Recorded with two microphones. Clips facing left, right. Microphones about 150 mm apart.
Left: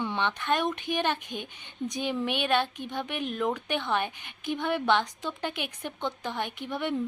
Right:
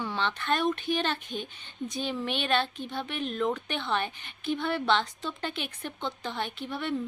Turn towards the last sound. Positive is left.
turn(degrees=15)  # may be behind; listen again after turning